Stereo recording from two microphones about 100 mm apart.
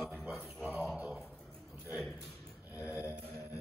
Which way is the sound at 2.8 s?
15° right (ahead or behind).